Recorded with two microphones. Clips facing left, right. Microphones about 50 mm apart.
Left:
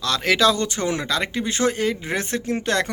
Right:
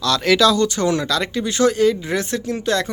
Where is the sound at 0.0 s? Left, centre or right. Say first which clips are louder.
Right 3 dB; left.